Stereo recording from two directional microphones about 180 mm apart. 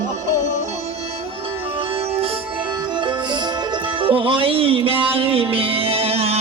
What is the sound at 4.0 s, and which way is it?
Music, 30° right (ahead or behind).